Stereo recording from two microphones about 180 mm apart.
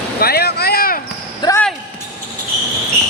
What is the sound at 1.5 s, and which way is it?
Basketball bounce, 20° left (ahead or behind).